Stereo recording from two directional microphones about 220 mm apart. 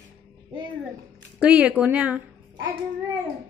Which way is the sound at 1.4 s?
5° right (ahead or behind).